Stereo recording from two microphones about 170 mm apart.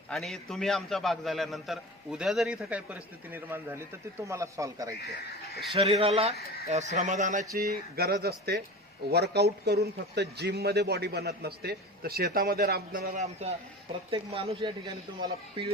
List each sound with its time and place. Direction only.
0.1 s a man's voice: centre (ahead or behind); by 4.9 s 20° right (ahead or behind)
5.0 s speech: 65° left (ahead or behind)
5.7 s speech: 35° right (ahead or behind)
7.6 s speech: 65° right (ahead or behind)
14.1 s speech: 35° right (ahead or behind)